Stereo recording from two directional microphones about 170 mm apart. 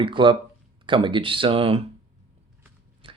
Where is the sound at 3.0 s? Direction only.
30° right (ahead or behind).